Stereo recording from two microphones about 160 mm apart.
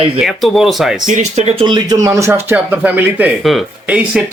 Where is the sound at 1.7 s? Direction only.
25° right (ahead or behind).